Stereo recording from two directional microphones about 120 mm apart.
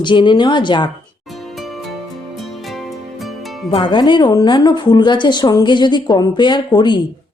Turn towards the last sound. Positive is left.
turn(degrees=40)  # may be behind; listen again after turning